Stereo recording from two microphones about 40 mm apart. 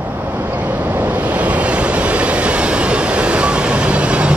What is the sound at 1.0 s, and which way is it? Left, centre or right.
Train, right.